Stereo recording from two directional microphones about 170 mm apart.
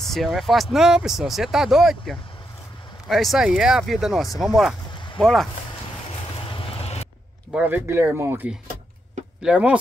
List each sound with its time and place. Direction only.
0.0 s speech: centre (ahead or behind)
4.9 s a sound: 25° left (ahead or behind)
5.2 s speech: centre (ahead or behind)
6.5 s vehicle: 35° left (ahead or behind)
7.5 s speech: 10° right (ahead or behind)